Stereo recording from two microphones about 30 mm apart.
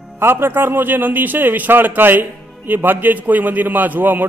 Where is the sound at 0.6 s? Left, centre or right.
Right.